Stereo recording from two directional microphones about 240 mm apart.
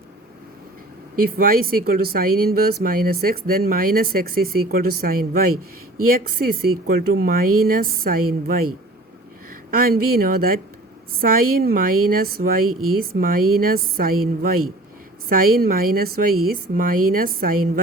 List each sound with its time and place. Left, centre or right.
1.1 s speech: right
9.7 s speech: right